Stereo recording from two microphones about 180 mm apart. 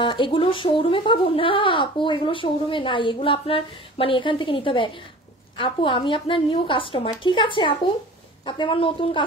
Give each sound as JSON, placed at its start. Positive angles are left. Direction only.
{"t": 0.0, "sound": "speech", "side_deg": 30}